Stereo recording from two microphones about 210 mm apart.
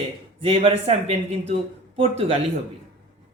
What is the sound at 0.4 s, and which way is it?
Speech, 25° right (ahead or behind).